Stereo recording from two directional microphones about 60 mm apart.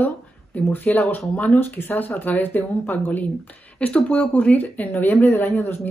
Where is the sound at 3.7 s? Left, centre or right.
Centre.